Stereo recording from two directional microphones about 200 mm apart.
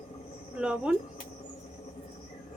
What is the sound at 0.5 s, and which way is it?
Cricket, 5° right (ahead or behind).